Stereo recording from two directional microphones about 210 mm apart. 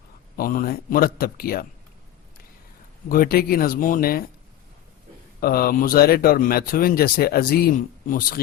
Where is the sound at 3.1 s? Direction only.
45° left (ahead or behind).